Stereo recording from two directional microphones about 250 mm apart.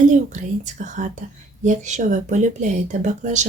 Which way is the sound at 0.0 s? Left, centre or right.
Right.